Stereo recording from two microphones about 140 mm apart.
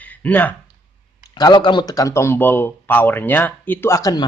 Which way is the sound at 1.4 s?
30° left (ahead or behind).